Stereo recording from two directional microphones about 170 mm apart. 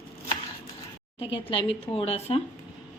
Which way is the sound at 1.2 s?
35° left (ahead or behind).